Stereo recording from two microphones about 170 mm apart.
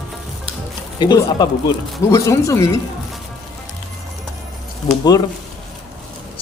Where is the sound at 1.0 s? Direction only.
25° left (ahead or behind).